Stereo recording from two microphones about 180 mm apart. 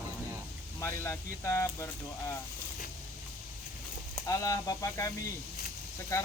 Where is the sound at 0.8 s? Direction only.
15° left (ahead or behind).